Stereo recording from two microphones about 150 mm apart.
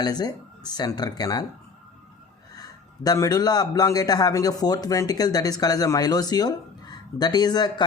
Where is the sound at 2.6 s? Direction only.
25° left (ahead or behind).